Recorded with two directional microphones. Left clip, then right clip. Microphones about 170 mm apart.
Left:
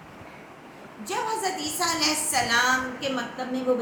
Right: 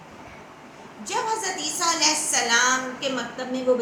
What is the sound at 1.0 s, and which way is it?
A woman's voice, 5° right (ahead or behind).